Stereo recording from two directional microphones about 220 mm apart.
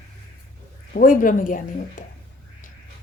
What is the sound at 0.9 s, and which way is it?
Speech, 40° left (ahead or behind).